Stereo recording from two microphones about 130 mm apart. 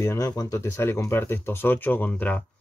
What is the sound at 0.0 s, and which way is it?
Speech, 25° left (ahead or behind).